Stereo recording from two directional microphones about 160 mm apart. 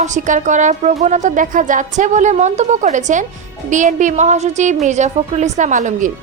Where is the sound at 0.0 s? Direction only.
50° right (ahead or behind).